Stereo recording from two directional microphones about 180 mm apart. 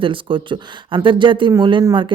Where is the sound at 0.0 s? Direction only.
30° right (ahead or behind).